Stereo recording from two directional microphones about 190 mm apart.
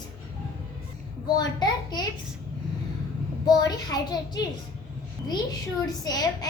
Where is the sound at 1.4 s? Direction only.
20° left (ahead or behind).